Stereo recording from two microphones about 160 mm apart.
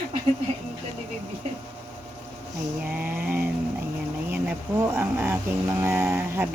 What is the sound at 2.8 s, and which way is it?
Child singing, 10° right (ahead or behind).